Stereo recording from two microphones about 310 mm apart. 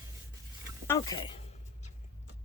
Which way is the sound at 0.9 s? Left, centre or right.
Centre.